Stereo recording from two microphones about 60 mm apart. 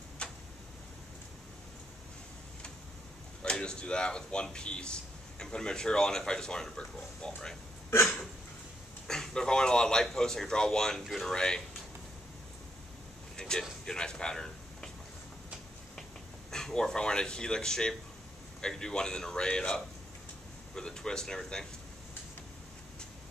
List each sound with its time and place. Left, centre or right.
0.2 s tick-tock: centre
3.4 s speech: centre
9.0 s speech: centre
13.4 s a sound: centre
13.8 s speech: centre
16.4 s speech: centre